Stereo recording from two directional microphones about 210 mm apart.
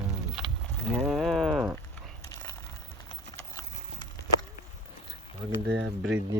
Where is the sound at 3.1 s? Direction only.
20° left (ahead or behind).